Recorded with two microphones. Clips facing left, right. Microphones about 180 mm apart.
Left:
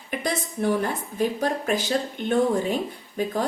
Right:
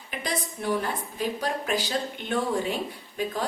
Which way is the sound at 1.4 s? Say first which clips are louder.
Left 4 dB; 50° left (ahead or behind).